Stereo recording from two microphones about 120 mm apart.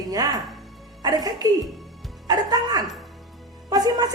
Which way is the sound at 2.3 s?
35° right (ahead or behind).